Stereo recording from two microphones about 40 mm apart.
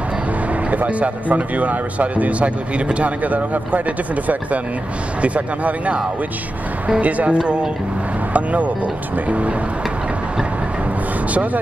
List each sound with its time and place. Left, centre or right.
0.7 s speech: right
5.2 s speech: right
7.0 s speech: right
7.3 s speech: right
8.3 s speech: right